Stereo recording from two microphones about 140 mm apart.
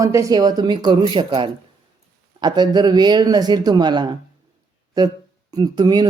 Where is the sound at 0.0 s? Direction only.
25° right (ahead or behind).